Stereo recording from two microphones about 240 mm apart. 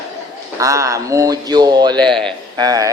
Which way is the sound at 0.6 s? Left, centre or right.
Centre.